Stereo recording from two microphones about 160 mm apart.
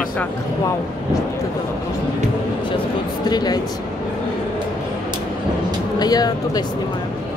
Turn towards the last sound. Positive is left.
turn(degrees=25)  # may be behind; listen again after turning